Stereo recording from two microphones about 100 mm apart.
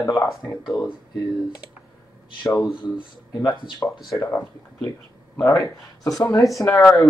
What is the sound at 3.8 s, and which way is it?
Speech, 20° left (ahead or behind).